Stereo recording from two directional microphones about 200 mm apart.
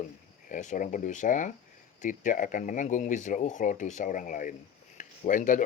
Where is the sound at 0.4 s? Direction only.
40° left (ahead or behind).